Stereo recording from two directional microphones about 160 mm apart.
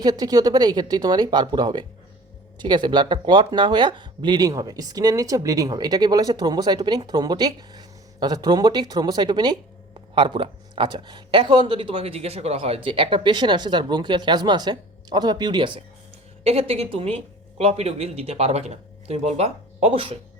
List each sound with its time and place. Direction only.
0.0 s speech: 25° right (ahead or behind)